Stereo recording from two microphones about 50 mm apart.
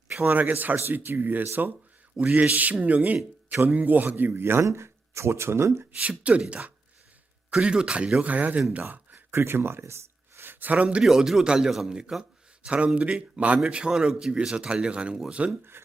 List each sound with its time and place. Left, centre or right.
0.2 s speech: right
4.6 s speech: right
6.0 s speech: right
8.8 s a sound: right
9.3 s speech: right
10.5 s speech: right
11.0 s speech: centre
13.9 s speech: centre